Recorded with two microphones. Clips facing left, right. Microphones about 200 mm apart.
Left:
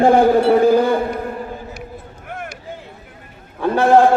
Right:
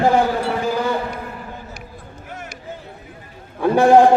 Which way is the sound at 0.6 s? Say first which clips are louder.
Left 8 dB; 55° left (ahead or behind).